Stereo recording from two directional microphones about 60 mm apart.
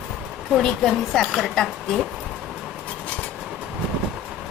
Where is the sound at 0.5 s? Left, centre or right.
Centre.